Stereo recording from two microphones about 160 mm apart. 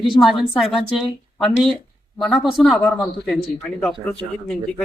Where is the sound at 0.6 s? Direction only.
Centre (ahead or behind).